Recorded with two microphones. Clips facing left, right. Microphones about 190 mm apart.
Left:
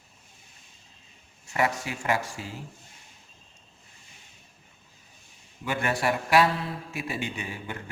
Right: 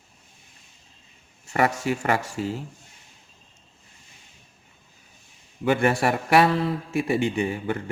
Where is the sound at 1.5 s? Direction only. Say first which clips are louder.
Right 5 dB; 55° right (ahead or behind).